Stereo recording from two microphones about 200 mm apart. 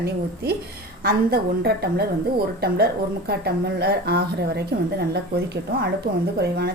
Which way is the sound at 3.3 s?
55° right (ahead or behind).